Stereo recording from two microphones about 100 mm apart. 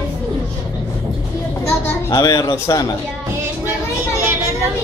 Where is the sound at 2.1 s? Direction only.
35° left (ahead or behind).